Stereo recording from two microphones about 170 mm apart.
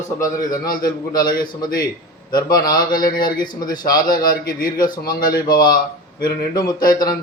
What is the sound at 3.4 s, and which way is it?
Speech, 25° left (ahead or behind).